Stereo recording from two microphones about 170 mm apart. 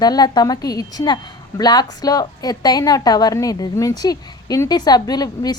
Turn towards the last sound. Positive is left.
turn(degrees=20)  # may be behind; listen again after turning